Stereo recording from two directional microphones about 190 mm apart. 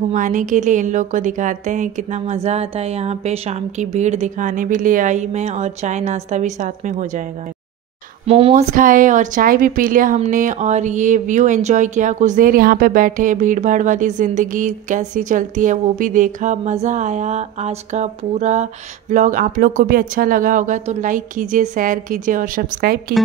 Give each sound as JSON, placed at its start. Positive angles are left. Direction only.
{"t": 0.1, "sound": "a woman's voice", "side_deg": -45}
{"t": 8.3, "sound": "a woman's voice", "side_deg": -30}
{"t": 8.7, "sound": "speech", "side_deg": -45}